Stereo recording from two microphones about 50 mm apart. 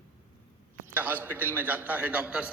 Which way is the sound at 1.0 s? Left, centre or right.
Right.